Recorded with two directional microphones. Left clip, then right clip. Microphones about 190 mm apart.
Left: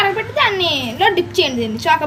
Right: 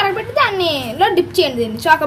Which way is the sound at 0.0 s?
45° right (ahead or behind).